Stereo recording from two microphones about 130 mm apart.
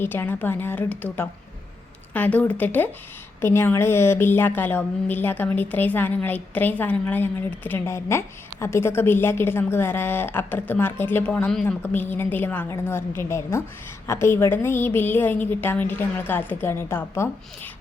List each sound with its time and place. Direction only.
0.0 s a woman's voice: 15° left (ahead or behind)